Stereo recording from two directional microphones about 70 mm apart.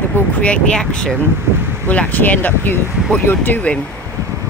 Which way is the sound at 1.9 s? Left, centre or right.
Left.